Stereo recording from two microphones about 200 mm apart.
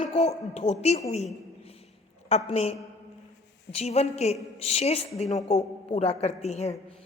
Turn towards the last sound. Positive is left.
turn(degrees=30)  # may be behind; listen again after turning